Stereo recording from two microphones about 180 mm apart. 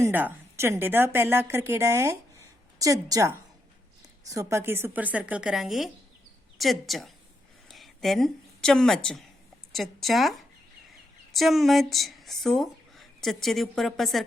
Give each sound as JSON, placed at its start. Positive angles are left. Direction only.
{"t": 0.0, "sound": "a woman's voice", "side_deg": -10}